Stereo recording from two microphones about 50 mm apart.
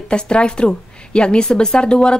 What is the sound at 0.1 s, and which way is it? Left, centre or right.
Speech, centre.